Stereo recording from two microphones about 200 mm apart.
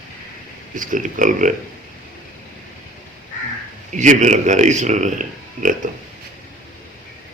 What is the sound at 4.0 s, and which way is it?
Speech, 35° right (ahead or behind).